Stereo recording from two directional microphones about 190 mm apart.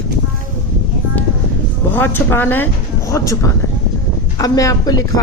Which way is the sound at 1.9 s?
10° left (ahead or behind).